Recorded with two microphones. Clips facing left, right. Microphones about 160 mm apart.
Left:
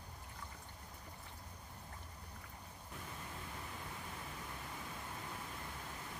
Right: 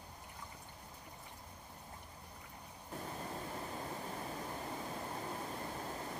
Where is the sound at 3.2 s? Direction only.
35° right (ahead or behind).